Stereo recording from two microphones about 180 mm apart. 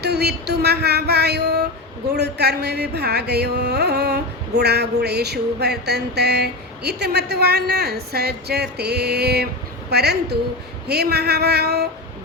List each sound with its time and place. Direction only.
0.0 s carnatic music: 65° right (ahead or behind)